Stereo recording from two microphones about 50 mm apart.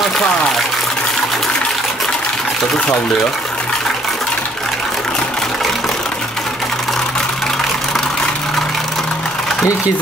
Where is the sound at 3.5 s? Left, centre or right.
Centre.